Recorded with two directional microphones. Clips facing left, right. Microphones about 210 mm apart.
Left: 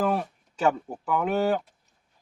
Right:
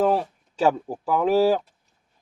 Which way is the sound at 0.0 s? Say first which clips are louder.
Right 5 dB; 30° right (ahead or behind).